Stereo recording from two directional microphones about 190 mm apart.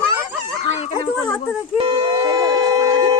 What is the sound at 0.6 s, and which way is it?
Speech, 35° left (ahead or behind).